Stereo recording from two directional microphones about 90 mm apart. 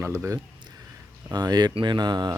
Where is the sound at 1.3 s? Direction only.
50° right (ahead or behind).